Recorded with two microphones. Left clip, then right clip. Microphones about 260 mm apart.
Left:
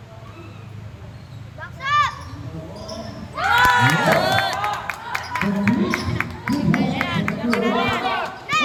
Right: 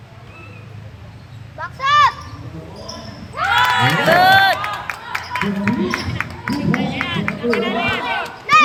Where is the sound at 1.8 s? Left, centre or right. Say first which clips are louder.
Right 6 dB; centre.